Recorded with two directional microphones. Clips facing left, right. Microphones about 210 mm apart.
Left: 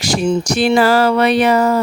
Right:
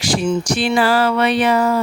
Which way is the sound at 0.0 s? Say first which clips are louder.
Left 2 dB; 40° left (ahead or behind).